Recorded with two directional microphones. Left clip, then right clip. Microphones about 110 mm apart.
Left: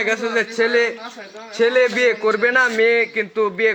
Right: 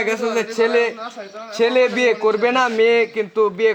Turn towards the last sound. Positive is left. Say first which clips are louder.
# right 1 dB
turn(degrees=-50)  # may be behind; listen again after turning